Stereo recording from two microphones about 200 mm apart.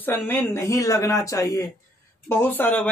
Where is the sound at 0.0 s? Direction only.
10° left (ahead or behind).